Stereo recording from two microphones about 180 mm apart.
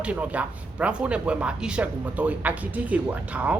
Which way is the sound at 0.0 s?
10° right (ahead or behind).